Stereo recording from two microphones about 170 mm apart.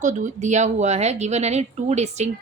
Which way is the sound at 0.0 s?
45° right (ahead or behind).